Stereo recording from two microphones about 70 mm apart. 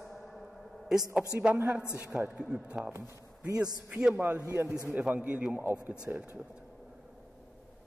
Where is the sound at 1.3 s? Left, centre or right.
Centre.